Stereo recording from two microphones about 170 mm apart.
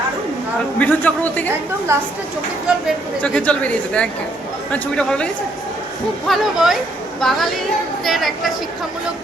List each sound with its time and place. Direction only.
0.8 s speech: 10° left (ahead or behind)
1.9 s speech: 15° right (ahead or behind)
3.2 s speech: 5° left (ahead or behind)